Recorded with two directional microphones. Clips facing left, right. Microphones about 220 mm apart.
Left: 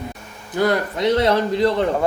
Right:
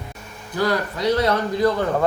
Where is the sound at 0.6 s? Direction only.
20° left (ahead or behind).